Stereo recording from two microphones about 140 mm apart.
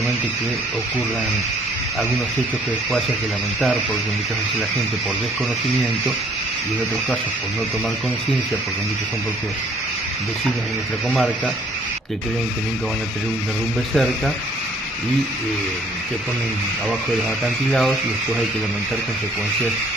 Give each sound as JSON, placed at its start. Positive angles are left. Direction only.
{"t": 11.1, "sound": "speech", "side_deg": 5}
{"t": 13.9, "sound": "speech", "side_deg": 5}
{"t": 17.6, "sound": "speech", "side_deg": 5}